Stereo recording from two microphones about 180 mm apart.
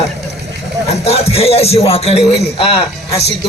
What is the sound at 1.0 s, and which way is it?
A man's voice, 35° left (ahead or behind).